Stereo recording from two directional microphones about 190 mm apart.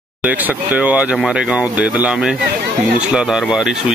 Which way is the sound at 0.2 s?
10° right (ahead or behind).